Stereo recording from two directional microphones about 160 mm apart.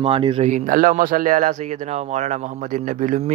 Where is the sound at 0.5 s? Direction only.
55° right (ahead or behind).